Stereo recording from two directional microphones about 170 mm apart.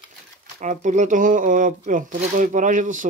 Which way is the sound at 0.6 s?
45° right (ahead or behind).